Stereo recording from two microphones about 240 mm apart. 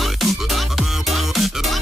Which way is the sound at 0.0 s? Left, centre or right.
Centre.